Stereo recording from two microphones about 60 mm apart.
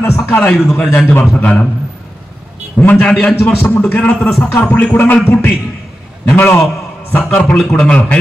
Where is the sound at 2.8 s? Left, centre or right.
Left.